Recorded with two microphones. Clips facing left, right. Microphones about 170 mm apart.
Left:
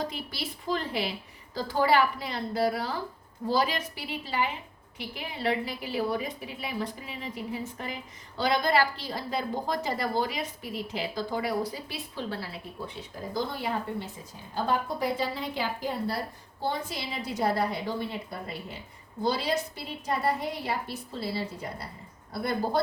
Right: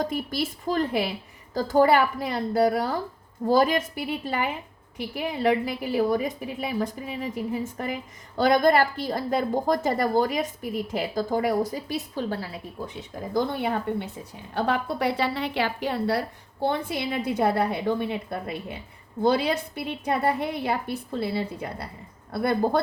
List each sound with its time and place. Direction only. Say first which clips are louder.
0.0 s a woman's voice: right 7 dB; 50° right (ahead or behind)
13.3 s a woman's voice: right 6 dB; 55° right (ahead or behind)